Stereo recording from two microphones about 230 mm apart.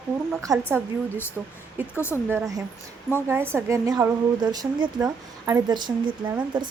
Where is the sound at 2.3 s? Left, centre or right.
Centre.